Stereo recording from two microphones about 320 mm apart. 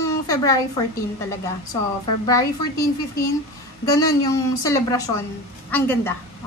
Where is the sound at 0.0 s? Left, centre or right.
Centre.